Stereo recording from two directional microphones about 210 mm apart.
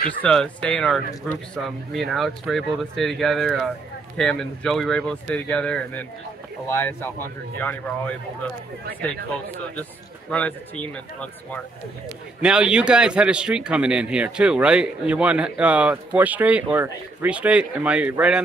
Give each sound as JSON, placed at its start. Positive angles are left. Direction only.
{"t": 0.2, "sound": "speech", "side_deg": 5}
{"t": 10.3, "sound": "speech", "side_deg": 5}
{"t": 12.4, "sound": "speech", "side_deg": -5}